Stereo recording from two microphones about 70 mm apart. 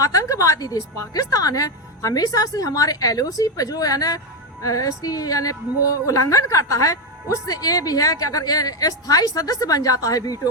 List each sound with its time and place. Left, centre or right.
0.0 s a woman's voice: left